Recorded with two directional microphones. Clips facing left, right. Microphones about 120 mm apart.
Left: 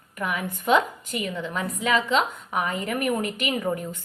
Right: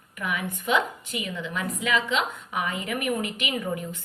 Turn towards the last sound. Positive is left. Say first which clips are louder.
# left 3 dB
turn(degrees=40)  # may be behind; listen again after turning